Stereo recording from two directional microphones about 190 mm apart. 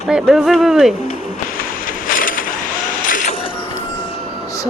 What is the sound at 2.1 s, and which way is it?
Boat, 45° left (ahead or behind).